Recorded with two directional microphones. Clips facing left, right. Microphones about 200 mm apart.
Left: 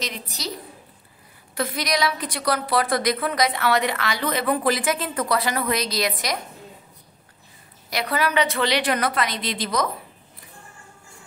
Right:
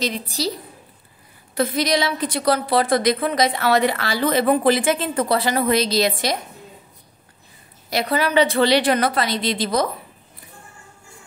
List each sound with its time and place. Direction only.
0.0 s a woman's voice: 30° right (ahead or behind)
1.6 s a woman's voice: 25° right (ahead or behind)
7.9 s a woman's voice: 30° right (ahead or behind)